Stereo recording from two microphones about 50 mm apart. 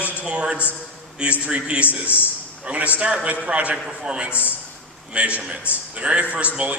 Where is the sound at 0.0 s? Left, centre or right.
Right.